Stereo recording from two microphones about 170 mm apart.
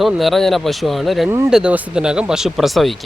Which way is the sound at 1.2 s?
15° right (ahead or behind).